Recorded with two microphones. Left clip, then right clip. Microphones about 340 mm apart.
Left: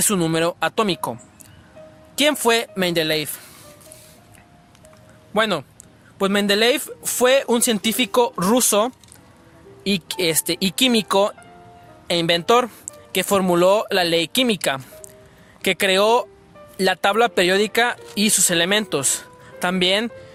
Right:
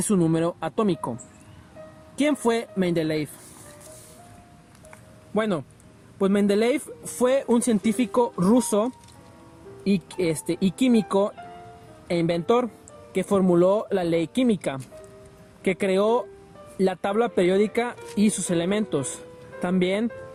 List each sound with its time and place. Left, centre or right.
0.0 s speech: left
2.1 s speech: left
5.3 s speech: left